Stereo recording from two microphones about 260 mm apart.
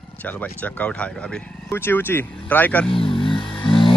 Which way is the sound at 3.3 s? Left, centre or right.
Centre.